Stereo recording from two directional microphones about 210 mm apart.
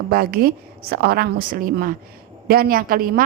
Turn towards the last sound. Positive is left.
turn(degrees=-45)  # may be behind; listen again after turning